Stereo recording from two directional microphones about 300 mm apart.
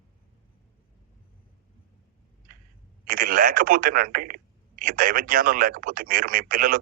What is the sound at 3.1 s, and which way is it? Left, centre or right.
Speech, right.